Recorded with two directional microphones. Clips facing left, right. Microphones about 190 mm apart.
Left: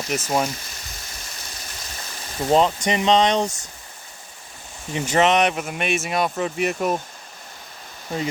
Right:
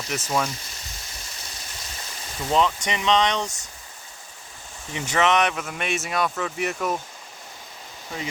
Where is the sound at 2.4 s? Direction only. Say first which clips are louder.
Left 4 dB; 40° left (ahead or behind).